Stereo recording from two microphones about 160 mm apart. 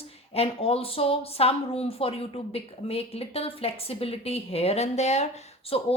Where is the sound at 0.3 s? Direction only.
40° left (ahead or behind).